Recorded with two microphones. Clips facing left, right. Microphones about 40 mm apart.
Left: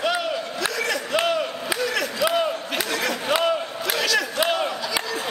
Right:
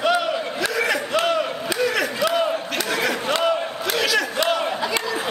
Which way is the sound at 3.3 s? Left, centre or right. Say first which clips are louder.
Left 2 dB; centre.